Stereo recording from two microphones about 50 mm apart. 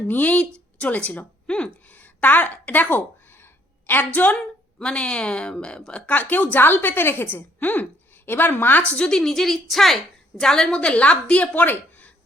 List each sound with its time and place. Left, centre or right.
0.1 s a woman's voice: left
1.5 s a sound: left
1.9 s a sound: left
4.8 s a woman's voice: centre
5.9 s a woman's voice: left
8.9 s a woman's voice: centre
10.8 s a woman's voice: left
11.5 s speech: left